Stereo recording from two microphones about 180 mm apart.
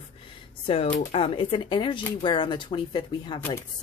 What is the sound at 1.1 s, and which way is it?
Speech, 30° left (ahead or behind).